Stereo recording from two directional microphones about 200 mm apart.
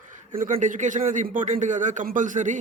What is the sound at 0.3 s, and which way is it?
A man's voice, 40° right (ahead or behind).